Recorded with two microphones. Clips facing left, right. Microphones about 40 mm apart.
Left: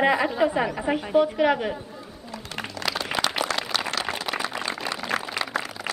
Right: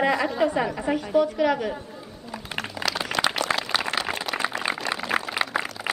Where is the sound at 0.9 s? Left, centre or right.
Centre.